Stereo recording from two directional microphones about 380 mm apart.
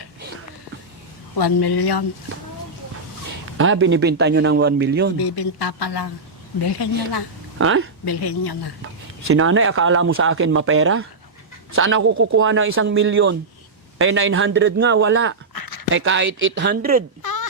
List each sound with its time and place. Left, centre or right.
1.4 s a woman's voice: left
3.6 s speech: right
5.2 s a woman's voice: left
7.6 s speech: right
8.0 s a woman's voice: left
9.2 s speech: right
15.5 s a sound: left
15.9 s speech: right
17.2 s a sound: left